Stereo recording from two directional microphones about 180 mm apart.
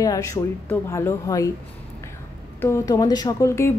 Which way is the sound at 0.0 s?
20° left (ahead or behind).